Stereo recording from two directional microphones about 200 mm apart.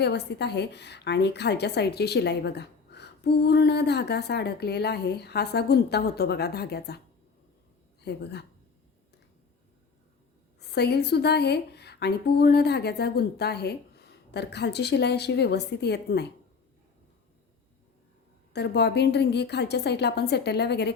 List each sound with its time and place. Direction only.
0.0 s a woman's voice: 55° left (ahead or behind)
8.0 s a woman's voice: 55° left (ahead or behind)
10.6 s a woman's voice: 55° left (ahead or behind)
18.5 s a woman's voice: 55° left (ahead or behind)